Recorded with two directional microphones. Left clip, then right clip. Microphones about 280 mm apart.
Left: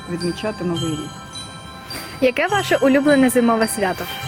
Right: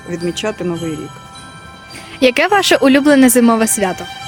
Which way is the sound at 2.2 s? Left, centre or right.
Right.